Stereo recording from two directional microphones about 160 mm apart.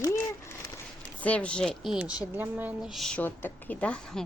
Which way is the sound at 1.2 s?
10° left (ahead or behind).